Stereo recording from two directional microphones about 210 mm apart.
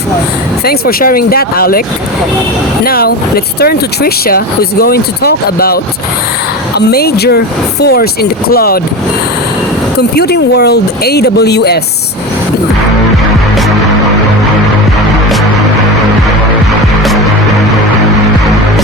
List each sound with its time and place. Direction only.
0.6 s speech: 45° left (ahead or behind)
2.8 s speech: 45° left (ahead or behind)
10.0 s speech: 50° left (ahead or behind)